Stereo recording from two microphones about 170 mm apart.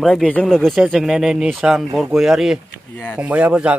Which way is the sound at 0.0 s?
5° left (ahead or behind).